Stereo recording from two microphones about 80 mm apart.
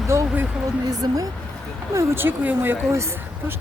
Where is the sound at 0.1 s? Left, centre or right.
Right.